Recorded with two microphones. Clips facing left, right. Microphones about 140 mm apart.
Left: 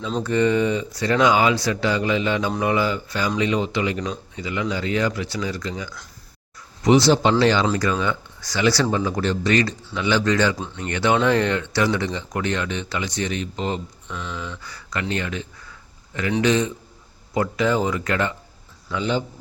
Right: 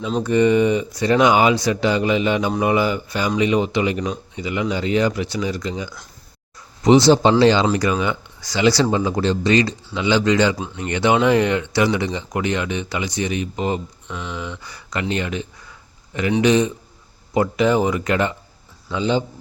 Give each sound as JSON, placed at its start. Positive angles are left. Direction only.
{"t": 0.0, "sound": "speech", "side_deg": -15}
{"t": 14.6, "sound": "speech", "side_deg": -15}